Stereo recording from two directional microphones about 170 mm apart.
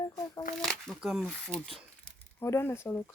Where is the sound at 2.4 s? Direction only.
15° left (ahead or behind).